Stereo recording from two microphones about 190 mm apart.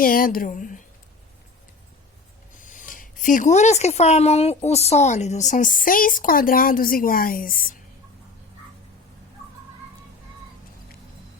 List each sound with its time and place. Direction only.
0.0 s speech: 50° left (ahead or behind)
2.6 s speech: 40° left (ahead or behind)